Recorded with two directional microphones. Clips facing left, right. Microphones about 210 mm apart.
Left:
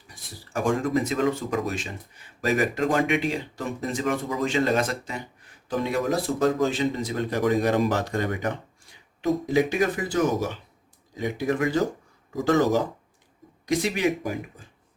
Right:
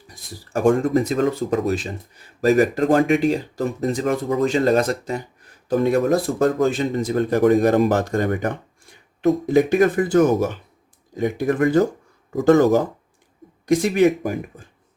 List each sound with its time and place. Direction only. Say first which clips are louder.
0.5 s speech: right 8 dB; 55° right (ahead or behind)
0.9 s speech: right 4 dB; 35° right (ahead or behind); by 14.3 s 55° right (ahead or behind)